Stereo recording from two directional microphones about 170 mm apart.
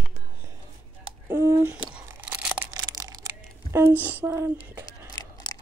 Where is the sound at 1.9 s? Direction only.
10° right (ahead or behind).